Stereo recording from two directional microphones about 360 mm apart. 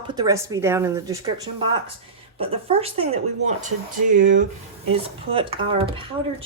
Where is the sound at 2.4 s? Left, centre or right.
Centre.